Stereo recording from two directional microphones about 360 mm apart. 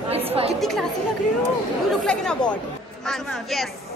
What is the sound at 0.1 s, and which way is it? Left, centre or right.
Chatter, centre.